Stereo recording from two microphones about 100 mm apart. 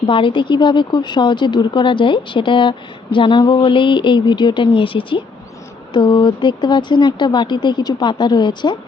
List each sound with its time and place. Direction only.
0.1 s speech: 55° left (ahead or behind)
5.9 s speech: 50° left (ahead or behind)